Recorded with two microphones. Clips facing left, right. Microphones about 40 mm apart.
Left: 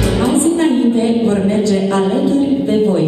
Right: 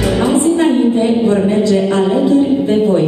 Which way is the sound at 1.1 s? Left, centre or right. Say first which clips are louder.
Right 1 dB; centre.